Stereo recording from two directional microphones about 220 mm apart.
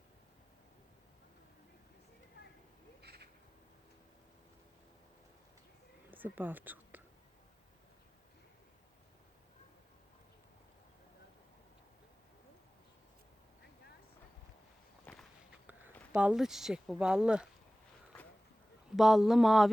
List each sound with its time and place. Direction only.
3.0 s owl: 45° right (ahead or behind)
6.1 s speech: 10° right (ahead or behind)
15.1 s walk: 5° left (ahead or behind)
16.1 s speech: 5° right (ahead or behind)
18.9 s speech: centre (ahead or behind)